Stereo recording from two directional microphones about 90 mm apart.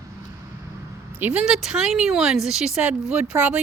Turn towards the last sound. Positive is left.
turn(degrees=-15)  # may be behind; listen again after turning